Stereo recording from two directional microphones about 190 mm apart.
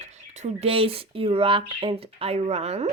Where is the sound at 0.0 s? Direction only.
40° right (ahead or behind).